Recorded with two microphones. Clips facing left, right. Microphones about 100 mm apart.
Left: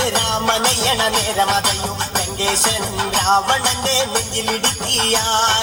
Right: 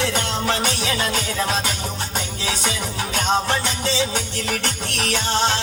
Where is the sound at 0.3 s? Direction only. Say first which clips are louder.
Left 4 dB; 65° left (ahead or behind).